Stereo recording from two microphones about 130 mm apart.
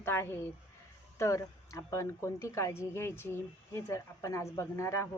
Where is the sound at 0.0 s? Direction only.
20° left (ahead or behind).